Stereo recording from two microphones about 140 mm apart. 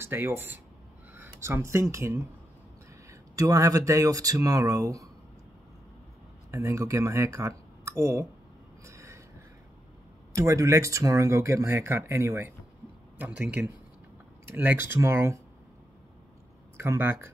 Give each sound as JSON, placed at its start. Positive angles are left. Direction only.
{"t": 0.0, "sound": "speech", "side_deg": -15}
{"t": 6.5, "sound": "speech", "side_deg": -20}
{"t": 8.8, "sound": "gasp", "side_deg": -20}
{"t": 10.3, "sound": "speech", "side_deg": -20}
{"t": 16.7, "sound": "speech", "side_deg": -20}